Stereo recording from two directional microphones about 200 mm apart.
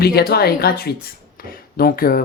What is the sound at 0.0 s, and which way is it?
Speech, 50° left (ahead or behind).